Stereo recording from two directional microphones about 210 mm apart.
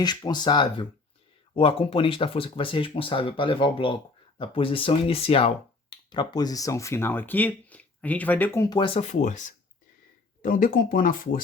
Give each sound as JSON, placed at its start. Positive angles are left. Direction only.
{"t": 0.0, "sound": "speech", "side_deg": 20}